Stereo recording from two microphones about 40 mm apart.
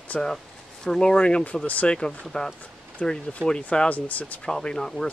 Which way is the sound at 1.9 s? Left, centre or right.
Left.